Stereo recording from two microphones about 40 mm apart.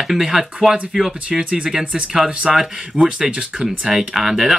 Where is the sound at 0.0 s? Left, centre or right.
Centre.